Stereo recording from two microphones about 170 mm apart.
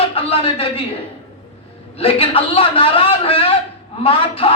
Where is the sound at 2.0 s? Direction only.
35° left (ahead or behind).